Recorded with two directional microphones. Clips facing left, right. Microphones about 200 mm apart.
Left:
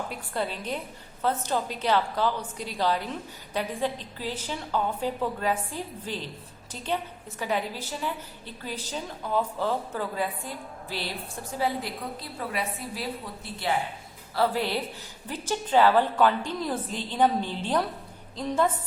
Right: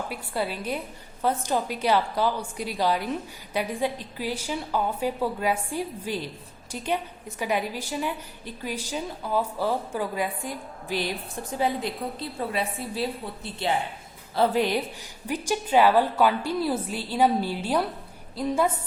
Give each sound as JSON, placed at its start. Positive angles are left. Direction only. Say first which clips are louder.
{"t": 0.1, "sound": "a woman's voice", "louder": "right 2 dB", "side_deg": -5}